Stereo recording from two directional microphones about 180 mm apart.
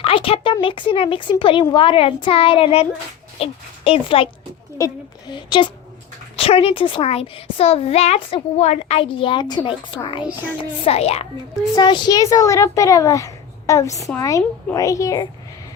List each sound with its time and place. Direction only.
0.0 s a sound: 30° left (ahead or behind)
0.5 s a child's voice: 30° left (ahead or behind)
4.8 s a child's voice: 20° left (ahead or behind)